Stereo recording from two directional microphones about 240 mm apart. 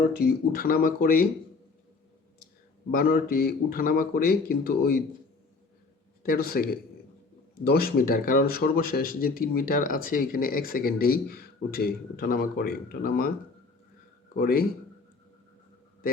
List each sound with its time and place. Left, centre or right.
0.1 s speech: left
2.9 s speech: left
6.2 s speech: left
14.3 s speech: left